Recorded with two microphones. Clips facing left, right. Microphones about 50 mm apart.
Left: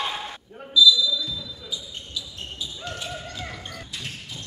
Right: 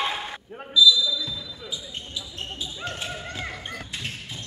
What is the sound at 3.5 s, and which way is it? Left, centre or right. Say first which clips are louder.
Crow: right 2 dB; right.